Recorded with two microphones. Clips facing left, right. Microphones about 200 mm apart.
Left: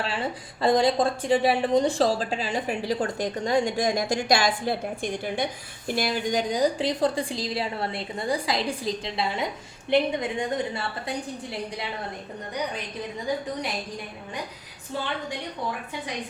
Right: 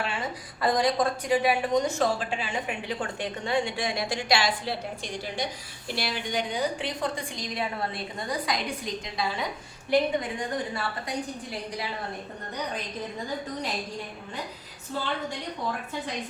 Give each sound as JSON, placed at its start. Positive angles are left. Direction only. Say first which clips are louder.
{"t": 0.0, "sound": "a woman's voice", "louder": "left 3 dB", "side_deg": 30}